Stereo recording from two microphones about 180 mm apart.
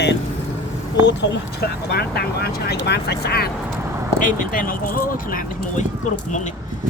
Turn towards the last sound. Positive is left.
turn(degrees=50)  # may be behind; listen again after turning